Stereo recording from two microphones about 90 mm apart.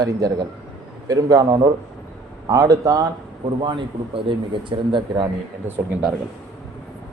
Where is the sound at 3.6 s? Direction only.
65° right (ahead or behind).